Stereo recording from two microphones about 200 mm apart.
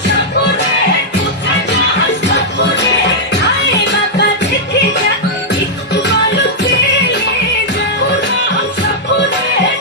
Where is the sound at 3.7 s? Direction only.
60° left (ahead or behind).